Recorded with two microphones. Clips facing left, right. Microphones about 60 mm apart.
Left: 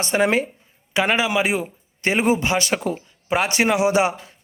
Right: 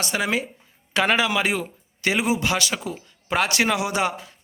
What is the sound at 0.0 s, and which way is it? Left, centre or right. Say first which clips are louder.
Speech: left 5 dB; left.